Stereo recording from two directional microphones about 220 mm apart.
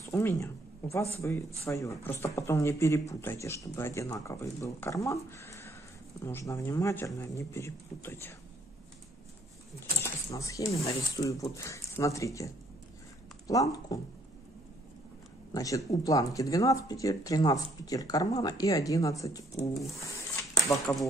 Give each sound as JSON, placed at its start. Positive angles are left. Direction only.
{"t": 0.0, "sound": "speech", "side_deg": 10}
{"t": 10.0, "sound": "speech", "side_deg": 15}
{"t": 13.5, "sound": "speech", "side_deg": 15}
{"t": 15.5, "sound": "speech", "side_deg": 15}
{"t": 20.7, "sound": "speech", "side_deg": 10}